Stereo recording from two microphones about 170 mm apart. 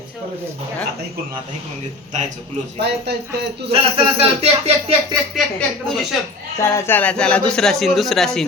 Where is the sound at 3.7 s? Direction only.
35° right (ahead or behind).